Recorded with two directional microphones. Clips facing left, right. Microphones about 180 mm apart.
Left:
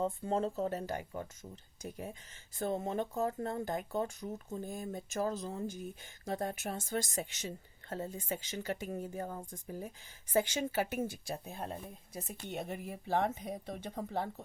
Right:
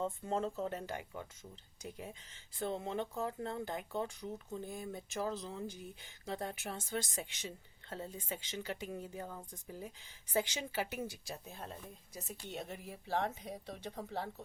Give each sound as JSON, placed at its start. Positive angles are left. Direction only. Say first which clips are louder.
{"t": 0.0, "sound": "speech", "louder": "left 3 dB", "side_deg": 35}